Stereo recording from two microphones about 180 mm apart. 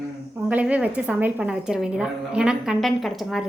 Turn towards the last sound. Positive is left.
turn(degrees=0)  # may be behind; listen again after turning